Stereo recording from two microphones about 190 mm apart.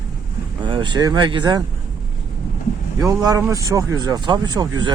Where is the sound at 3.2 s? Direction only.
20° right (ahead or behind).